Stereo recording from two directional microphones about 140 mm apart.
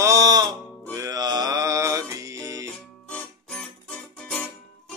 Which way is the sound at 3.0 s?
5° left (ahead or behind).